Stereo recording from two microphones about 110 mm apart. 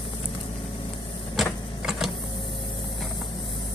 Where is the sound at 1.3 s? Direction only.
Centre (ahead or behind).